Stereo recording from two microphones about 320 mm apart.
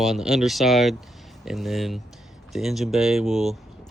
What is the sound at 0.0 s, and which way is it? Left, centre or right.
Speech, centre.